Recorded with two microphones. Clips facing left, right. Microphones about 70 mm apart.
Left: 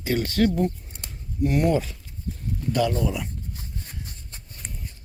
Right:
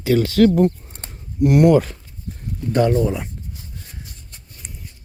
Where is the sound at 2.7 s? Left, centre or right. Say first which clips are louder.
Right 7 dB; right.